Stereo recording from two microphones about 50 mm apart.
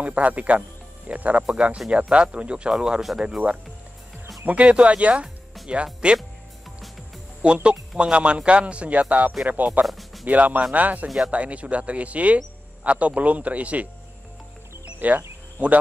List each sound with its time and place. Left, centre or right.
0.0 s a man's voice: right
7.4 s a man's voice: right
9.8 s speech: centre
10.2 s a man's voice: right
15.0 s speech: right